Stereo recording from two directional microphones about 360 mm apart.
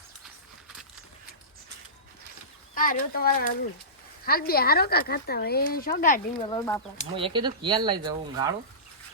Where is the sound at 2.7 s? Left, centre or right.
Left.